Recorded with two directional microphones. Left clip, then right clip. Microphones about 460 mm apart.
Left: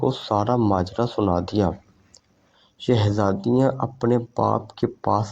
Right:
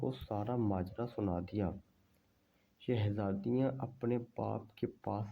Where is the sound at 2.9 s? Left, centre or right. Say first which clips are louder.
Left 17 dB; right.